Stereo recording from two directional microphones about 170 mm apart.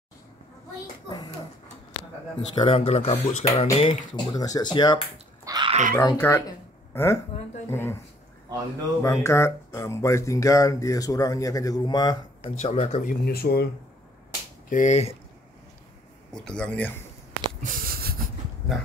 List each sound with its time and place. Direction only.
1.0 s a child's voice: 25° left (ahead or behind)
2.5 s speech: 30° left (ahead or behind)
5.4 s dog: 20° right (ahead or behind)
5.7 s a sound: 45° right (ahead or behind)
5.9 s speech: 20° left (ahead or behind)
9.0 s speech: 15° left (ahead or behind)
12.5 s speech: 40° left (ahead or behind)
13.2 s speech: 65° left (ahead or behind)
14.7 s speech: 45° left (ahead or behind)
16.3 s speech: 5° left (ahead or behind)
17.3 s a sound: 50° right (ahead or behind)